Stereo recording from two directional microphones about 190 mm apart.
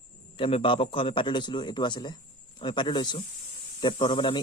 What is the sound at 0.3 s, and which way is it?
Speech, 25° left (ahead or behind).